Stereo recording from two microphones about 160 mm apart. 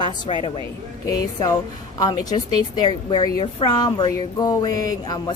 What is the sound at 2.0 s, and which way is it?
A woman's voice, 25° left (ahead or behind).